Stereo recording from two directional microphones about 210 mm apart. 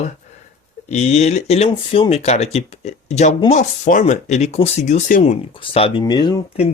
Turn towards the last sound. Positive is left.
turn(degrees=20)  # may be behind; listen again after turning